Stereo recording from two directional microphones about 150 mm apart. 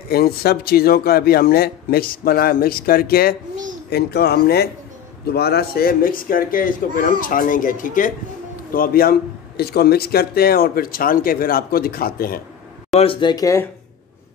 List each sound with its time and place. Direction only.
0.1 s a man's voice: 90° left; by 8.1 s 60° left (ahead or behind)
8.7 s a man's voice: 75° left (ahead or behind)
9.6 s speech: 90° left
13.0 s speech: 35° left (ahead or behind)